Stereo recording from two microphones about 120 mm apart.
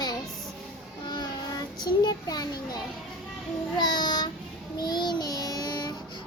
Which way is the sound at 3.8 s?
35° left (ahead or behind).